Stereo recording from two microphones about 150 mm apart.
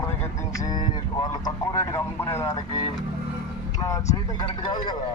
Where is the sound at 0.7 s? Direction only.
30° left (ahead or behind).